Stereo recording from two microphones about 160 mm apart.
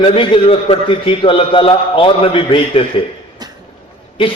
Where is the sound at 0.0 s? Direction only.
30° left (ahead or behind).